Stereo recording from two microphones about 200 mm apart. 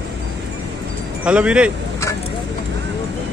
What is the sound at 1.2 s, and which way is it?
Speech, 5° right (ahead or behind).